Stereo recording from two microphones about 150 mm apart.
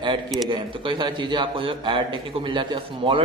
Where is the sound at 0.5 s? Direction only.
30° right (ahead or behind).